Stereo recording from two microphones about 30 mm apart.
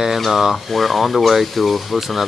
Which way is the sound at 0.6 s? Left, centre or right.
Centre.